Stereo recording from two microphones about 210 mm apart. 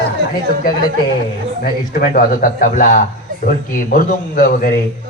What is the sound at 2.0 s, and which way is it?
A man's voice, 40° left (ahead or behind).